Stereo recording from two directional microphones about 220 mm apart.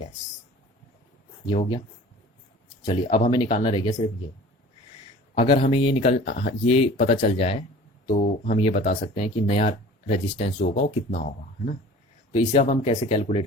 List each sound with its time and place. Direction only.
1.5 s speech: 20° left (ahead or behind)
2.8 s speech: 20° left (ahead or behind)
5.3 s speech: 25° left (ahead or behind)
12.3 s speech: 25° left (ahead or behind)